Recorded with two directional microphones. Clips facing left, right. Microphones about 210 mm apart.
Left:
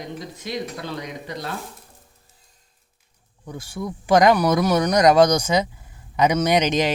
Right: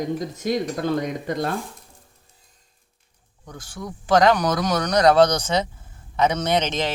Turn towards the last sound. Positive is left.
turn(degrees=15)  # may be behind; listen again after turning